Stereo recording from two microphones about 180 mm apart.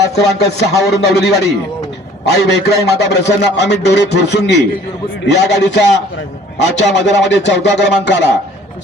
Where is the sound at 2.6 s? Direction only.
70° left (ahead or behind).